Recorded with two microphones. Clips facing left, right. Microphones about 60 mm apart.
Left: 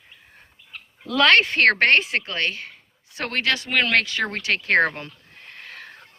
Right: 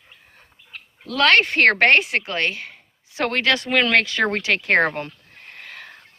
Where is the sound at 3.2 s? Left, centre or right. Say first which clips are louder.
Right 3 dB; right.